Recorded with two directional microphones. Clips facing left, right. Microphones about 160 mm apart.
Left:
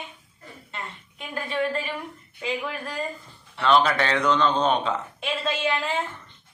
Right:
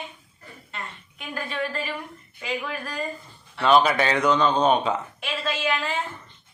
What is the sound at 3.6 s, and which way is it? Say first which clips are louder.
Speech: right 2 dB; 10° right (ahead or behind).